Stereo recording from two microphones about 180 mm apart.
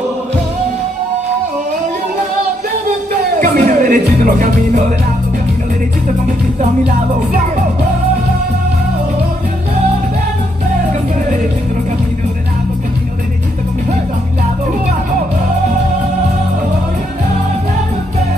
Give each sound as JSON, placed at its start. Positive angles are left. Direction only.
{"t": 3.3, "sound": "music", "side_deg": -45}